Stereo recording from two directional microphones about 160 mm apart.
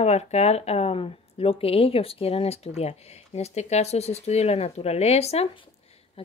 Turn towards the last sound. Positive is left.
turn(degrees=35)  # may be behind; listen again after turning